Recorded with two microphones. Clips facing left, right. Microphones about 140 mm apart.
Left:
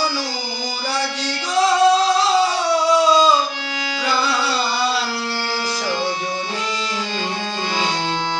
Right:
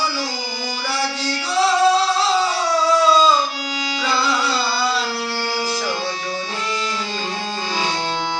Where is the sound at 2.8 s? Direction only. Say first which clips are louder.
Even; 15° left (ahead or behind).